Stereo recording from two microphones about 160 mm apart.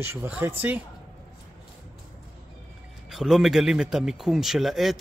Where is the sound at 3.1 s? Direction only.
Centre (ahead or behind).